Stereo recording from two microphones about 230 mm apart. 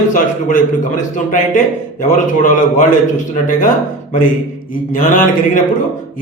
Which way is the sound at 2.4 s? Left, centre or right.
Left.